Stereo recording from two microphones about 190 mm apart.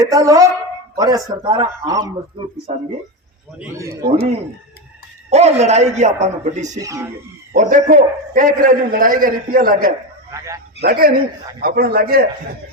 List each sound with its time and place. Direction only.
0.0 s a woman's voice: 20° right (ahead or behind)
5.3 s a man's voice: 35° right (ahead or behind)
6.7 s a woman's voice: 15° right (ahead or behind)
7.5 s a man's voice: 40° right (ahead or behind)
10.3 s a woman's voice: 15° right (ahead or behind)
10.8 s a man's voice: 50° right (ahead or behind)